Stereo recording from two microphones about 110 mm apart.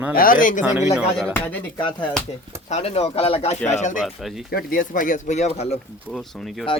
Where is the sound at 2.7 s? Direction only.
80° left.